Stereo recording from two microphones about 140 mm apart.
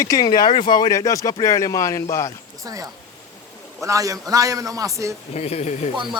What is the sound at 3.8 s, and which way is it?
A man's voice, 25° right (ahead or behind).